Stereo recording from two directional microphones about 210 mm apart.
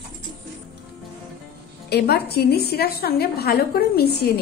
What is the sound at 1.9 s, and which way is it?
A woman's voice, 50° left (ahead or behind).